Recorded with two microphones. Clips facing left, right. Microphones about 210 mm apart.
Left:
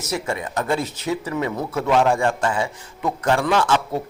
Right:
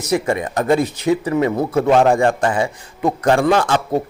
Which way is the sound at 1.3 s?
55° right (ahead or behind).